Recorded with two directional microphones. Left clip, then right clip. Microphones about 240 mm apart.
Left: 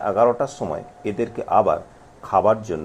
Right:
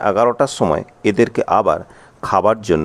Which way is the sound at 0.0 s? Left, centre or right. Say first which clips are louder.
Right 4 dB; right.